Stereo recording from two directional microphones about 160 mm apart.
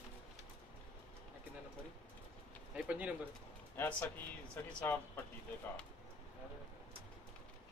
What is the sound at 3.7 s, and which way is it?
Speech, 10° left (ahead or behind).